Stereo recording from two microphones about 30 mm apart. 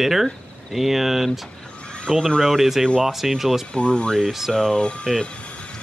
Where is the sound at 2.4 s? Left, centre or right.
Centre.